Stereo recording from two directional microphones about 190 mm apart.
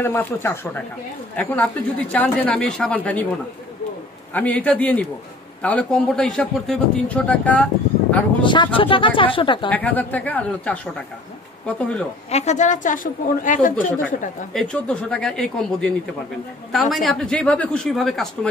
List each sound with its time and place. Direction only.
0.0 s speech: 10° left (ahead or behind)
4.3 s a man's voice: 10° left (ahead or behind)
8.4 s speech: 25° left (ahead or behind)
9.7 s speech: 10° left (ahead or behind)
12.3 s a woman's voice: 35° left (ahead or behind)
14.5 s a man's voice: 5° left (ahead or behind)